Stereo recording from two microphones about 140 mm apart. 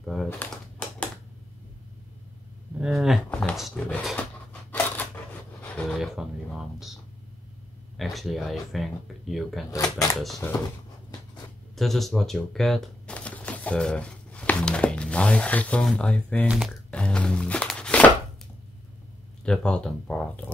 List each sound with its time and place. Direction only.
0.0 s typewriter: centre (ahead or behind)
2.8 s speech: centre (ahead or behind)
3.3 s a sound: 10° left (ahead or behind)
3.5 s a sound: centre (ahead or behind)
4.2 s scissors: 10° left (ahead or behind)
5.6 s a sound: 10° left (ahead or behind)
5.9 s speech: 5° right (ahead or behind)
8.0 s speech: centre (ahead or behind)
9.7 s speech: 25° left (ahead or behind)
11.7 s speech: centre (ahead or behind)
16.9 s music: 10° left (ahead or behind)
19.4 s speech: 5° left (ahead or behind)